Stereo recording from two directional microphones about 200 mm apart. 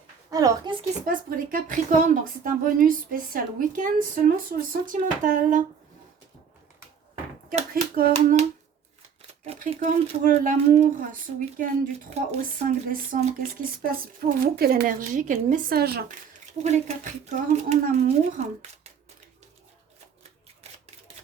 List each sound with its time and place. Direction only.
0.3 s a child's voice: 15° right (ahead or behind)
1.0 s speech: 45° right (ahead or behind)
7.7 s speech: 45° right (ahead or behind)
16.6 s speech: 35° right (ahead or behind)
20.6 s typewriter: 30° right (ahead or behind)